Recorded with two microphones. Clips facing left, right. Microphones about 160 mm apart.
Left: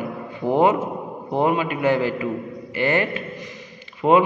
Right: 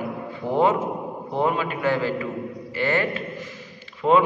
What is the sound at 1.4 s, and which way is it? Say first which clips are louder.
A man's voice: left 3 dB; 15° left (ahead or behind).